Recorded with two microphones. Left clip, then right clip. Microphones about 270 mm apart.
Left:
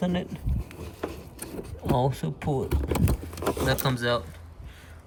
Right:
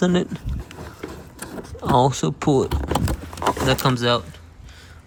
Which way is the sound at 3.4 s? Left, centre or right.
Right.